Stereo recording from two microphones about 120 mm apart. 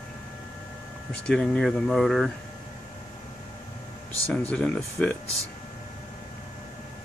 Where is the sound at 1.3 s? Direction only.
5° left (ahead or behind).